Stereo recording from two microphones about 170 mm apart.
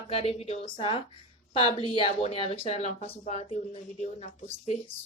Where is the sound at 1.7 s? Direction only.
30° left (ahead or behind).